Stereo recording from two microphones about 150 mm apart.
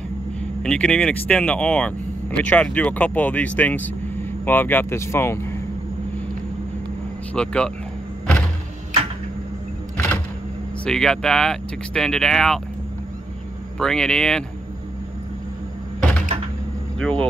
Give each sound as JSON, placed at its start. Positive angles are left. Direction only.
{"t": 0.6, "sound": "speech", "side_deg": 5}
{"t": 7.3, "sound": "speech", "side_deg": 5}
{"t": 9.9, "sound": "a sound", "side_deg": 15}
{"t": 10.9, "sound": "speech", "side_deg": 5}
{"t": 13.7, "sound": "speech", "side_deg": 5}
{"t": 17.0, "sound": "speech", "side_deg": 5}